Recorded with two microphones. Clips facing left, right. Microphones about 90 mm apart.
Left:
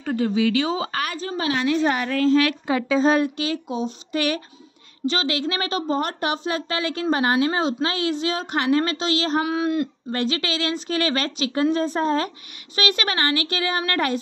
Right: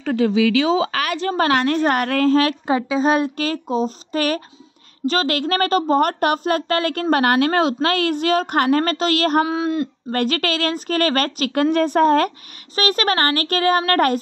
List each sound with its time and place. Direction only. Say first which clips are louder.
0.0 s speech: right 4 dB; 90° right
1.3 s a woman's voice: right 4 dB; 55° right (ahead or behind)
2.0 s a woman's voice: right 3 dB; 75° right (ahead or behind)
2.3 s a woman's voice: right 2 dB; 35° right (ahead or behind)
2.9 s a child's voice: even; 15° right (ahead or behind)
3.3 s speech: right 4 dB; 45° right (ahead or behind)
9.4 s speech: right 3 dB; 30° right (ahead or behind)
10.1 s speech: right 4 dB; 55° right (ahead or behind)
12.7 s speech: right 4 dB; 40° right (ahead or behind)